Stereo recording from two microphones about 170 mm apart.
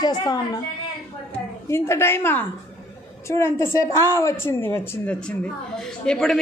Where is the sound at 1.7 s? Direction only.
15° left (ahead or behind).